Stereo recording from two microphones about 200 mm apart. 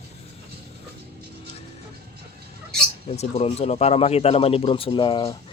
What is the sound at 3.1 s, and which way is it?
Speech, 30° left (ahead or behind).